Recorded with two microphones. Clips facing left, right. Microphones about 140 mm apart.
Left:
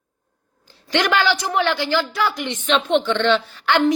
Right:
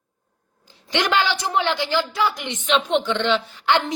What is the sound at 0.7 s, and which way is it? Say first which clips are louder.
A woman's voice: left 2 dB; 20° right (ahead or behind).